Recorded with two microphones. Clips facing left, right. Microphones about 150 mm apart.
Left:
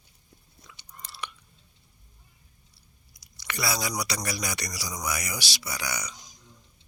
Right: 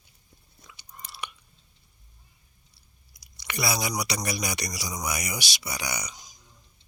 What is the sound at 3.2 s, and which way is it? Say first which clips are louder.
Chewing: right 1 dB; 15° right (ahead or behind).